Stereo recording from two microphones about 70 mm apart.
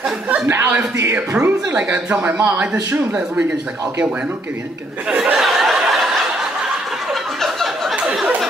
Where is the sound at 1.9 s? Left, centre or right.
Centre.